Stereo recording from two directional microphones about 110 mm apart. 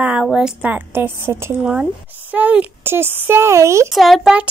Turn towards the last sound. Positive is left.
turn(degrees=0)  # may be behind; listen again after turning